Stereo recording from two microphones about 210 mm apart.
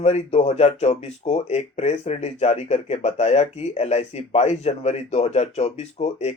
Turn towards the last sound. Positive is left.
turn(degrees=30)  # may be behind; listen again after turning